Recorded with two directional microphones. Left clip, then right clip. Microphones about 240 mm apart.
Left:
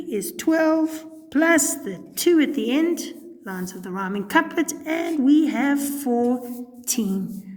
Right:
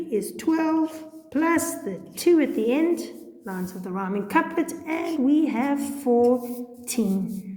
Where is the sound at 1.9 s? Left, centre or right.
Left.